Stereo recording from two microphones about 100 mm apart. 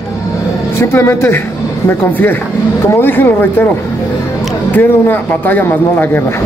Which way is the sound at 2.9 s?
20° left (ahead or behind).